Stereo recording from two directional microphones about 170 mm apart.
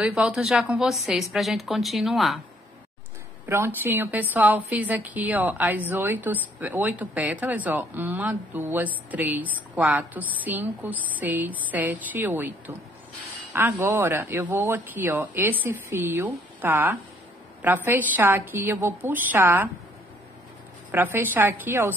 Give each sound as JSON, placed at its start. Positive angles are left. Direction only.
{"t": 0.0, "sound": "speech", "side_deg": -5}
{"t": 3.4, "sound": "a woman's voice", "side_deg": -15}
{"t": 20.9, "sound": "a woman's voice", "side_deg": -10}